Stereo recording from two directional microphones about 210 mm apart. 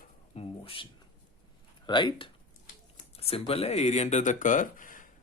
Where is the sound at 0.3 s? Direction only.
25° left (ahead or behind).